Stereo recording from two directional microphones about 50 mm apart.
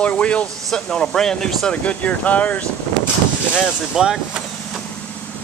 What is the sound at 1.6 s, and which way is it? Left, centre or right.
Speech, left.